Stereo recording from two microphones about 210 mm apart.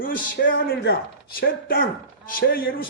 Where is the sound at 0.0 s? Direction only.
40° left (ahead or behind).